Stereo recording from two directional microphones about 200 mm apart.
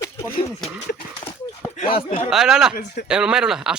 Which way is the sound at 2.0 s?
35° left (ahead or behind).